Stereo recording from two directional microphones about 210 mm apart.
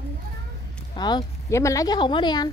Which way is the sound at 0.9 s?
20° left (ahead or behind).